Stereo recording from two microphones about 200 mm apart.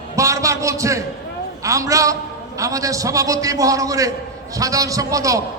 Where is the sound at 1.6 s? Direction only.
15° right (ahead or behind).